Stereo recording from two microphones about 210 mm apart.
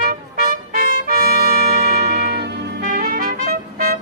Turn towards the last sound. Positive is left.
turn(degrees=-40)  # may be behind; listen again after turning